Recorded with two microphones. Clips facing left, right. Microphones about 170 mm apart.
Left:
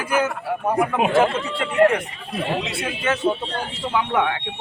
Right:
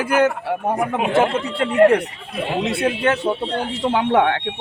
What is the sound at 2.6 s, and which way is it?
A man's voice, 60° right (ahead or behind).